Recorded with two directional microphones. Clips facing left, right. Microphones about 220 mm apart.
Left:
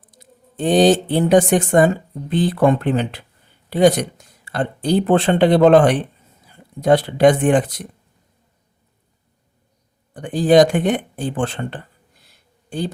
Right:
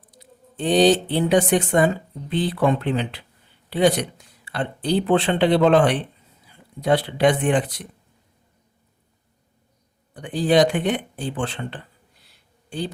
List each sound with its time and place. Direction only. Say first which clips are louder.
0.1 s speech: right 1 dB; 45° left (ahead or behind)
10.2 s speech: left 5 dB; 45° left (ahead or behind)
12.2 s a sound: left 2 dB; 45° left (ahead or behind)